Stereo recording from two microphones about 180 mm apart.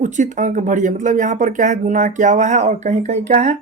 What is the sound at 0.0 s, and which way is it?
Speech, 40° right (ahead or behind).